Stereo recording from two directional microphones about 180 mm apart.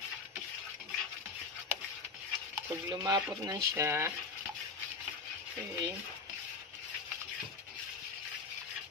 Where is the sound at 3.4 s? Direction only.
15° right (ahead or behind).